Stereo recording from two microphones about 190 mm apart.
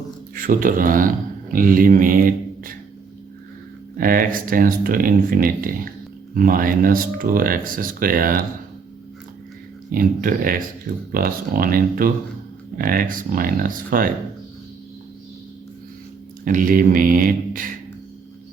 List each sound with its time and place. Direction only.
0.3 s a man's voice: 45° right (ahead or behind)
3.9 s speech: 50° right (ahead or behind)
9.9 s speech: 50° right (ahead or behind)
16.4 s speech: 45° right (ahead or behind)